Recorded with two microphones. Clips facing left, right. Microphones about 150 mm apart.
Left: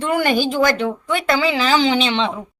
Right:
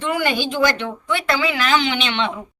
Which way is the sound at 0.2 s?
45° left (ahead or behind).